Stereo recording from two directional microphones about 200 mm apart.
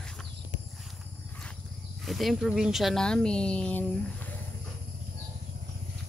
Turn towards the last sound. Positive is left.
turn(degrees=10)  # may be behind; listen again after turning